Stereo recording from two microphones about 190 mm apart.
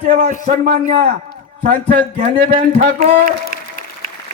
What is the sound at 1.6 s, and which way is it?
Speech, 40° right (ahead or behind).